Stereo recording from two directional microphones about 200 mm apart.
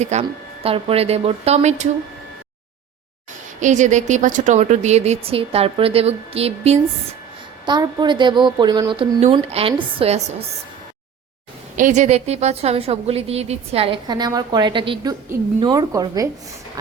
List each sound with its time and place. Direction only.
0.0 s a woman's voice: 35° right (ahead or behind)
3.6 s a woman's voice: 35° right (ahead or behind)
11.8 s a woman's voice: 35° right (ahead or behind); by 16.3 s 15° right (ahead or behind)